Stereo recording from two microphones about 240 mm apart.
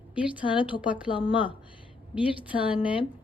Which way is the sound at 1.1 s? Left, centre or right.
Left.